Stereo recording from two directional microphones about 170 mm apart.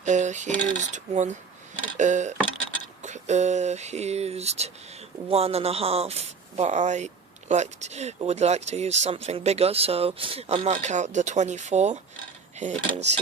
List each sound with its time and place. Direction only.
0.0 s speech: 45° right (ahead or behind)